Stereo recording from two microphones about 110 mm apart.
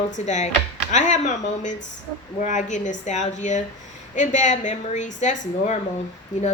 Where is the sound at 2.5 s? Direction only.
90° left.